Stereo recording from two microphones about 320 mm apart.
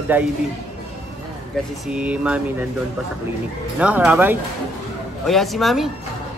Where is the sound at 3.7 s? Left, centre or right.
Centre.